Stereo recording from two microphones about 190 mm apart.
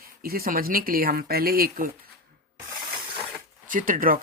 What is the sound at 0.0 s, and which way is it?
Speech, 50° right (ahead or behind).